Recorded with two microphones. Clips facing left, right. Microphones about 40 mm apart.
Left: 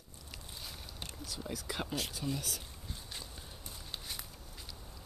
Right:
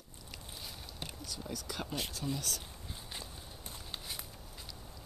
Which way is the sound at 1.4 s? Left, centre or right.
Centre.